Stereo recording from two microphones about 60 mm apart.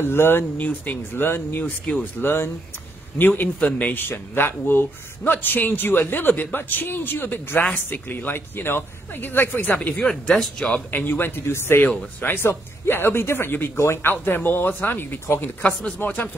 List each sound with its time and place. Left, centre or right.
0.0 s a man's voice: left
1.6 s a man's voice: left
10.9 s a man's voice: left